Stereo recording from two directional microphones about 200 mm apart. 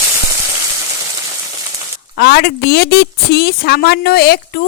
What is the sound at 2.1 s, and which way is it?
Speech, 50° left (ahead or behind).